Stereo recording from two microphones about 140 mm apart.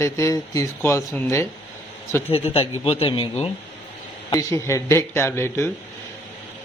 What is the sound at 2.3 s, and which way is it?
Speech, 45° left (ahead or behind).